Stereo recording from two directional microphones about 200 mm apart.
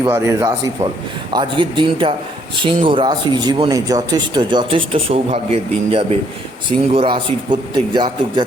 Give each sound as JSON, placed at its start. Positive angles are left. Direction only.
{"t": 0.1, "sound": "a man's voice", "side_deg": -15}